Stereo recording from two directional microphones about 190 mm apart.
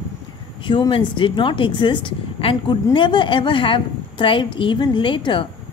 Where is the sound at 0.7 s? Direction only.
25° left (ahead or behind).